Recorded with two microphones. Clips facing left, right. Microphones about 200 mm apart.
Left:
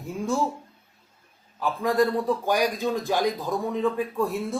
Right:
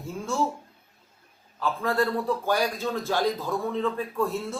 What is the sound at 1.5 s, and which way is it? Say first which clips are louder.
A man's voice: left 3 dB; 15° left (ahead or behind).